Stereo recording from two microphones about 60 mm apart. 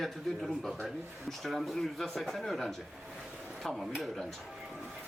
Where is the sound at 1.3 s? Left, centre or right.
Centre.